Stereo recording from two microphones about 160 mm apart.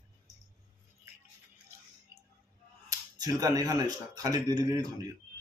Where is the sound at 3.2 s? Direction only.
25° right (ahead or behind).